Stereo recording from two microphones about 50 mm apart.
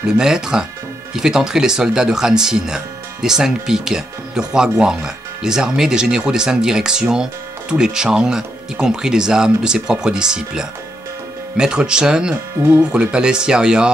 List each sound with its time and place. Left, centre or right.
0.0 s speech: centre